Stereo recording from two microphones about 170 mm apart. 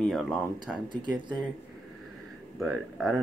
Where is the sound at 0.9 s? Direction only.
25° right (ahead or behind).